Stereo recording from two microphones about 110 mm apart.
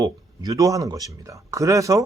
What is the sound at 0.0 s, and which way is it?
Speech, 30° right (ahead or behind).